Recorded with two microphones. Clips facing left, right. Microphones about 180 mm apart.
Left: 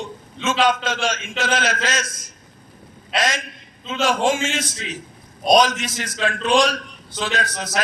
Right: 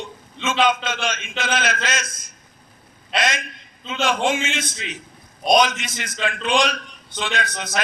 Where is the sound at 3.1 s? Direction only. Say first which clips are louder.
Left 1 dB; 40° left (ahead or behind).